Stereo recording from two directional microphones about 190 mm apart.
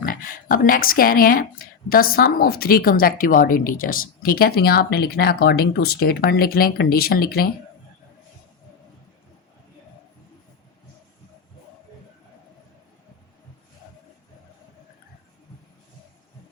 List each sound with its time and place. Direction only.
0.0 s speech: 45° left (ahead or behind)